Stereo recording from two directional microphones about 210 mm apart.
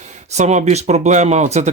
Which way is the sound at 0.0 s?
35° right (ahead or behind).